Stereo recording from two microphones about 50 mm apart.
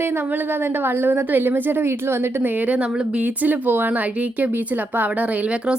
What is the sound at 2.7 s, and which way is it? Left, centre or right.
Speech, right.